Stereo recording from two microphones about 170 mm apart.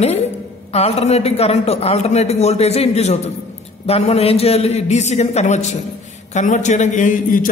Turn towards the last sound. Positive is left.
turn(degrees=50)  # may be behind; listen again after turning